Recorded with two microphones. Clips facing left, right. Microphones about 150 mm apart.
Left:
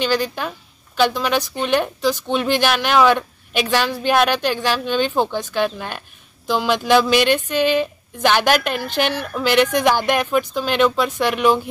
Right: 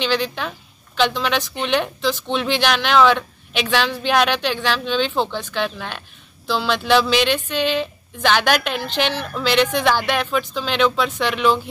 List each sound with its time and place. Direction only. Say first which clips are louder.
0.0 s speech: left 1 dB; 10° left (ahead or behind)